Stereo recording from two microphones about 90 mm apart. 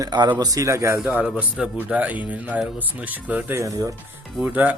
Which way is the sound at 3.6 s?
40° right (ahead or behind).